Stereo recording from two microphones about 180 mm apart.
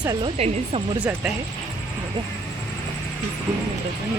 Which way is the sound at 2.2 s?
30° right (ahead or behind).